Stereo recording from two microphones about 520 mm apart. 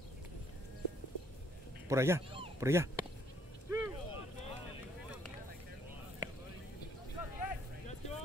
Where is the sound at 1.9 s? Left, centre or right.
Centre.